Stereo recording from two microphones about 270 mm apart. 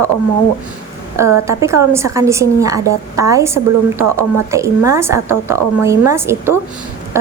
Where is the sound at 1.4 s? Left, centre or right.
Centre.